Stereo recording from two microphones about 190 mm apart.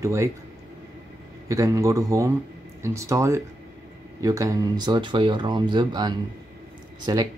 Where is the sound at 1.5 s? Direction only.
15° right (ahead or behind).